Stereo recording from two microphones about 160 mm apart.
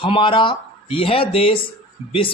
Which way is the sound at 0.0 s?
35° left (ahead or behind).